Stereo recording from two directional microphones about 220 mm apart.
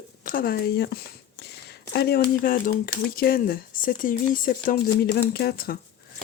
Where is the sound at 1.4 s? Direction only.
50° left (ahead or behind).